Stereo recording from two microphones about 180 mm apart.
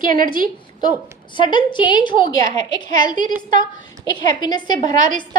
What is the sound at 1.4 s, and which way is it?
A woman's voice, 25° left (ahead or behind).